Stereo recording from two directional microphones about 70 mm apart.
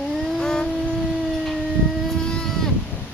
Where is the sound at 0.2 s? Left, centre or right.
Centre.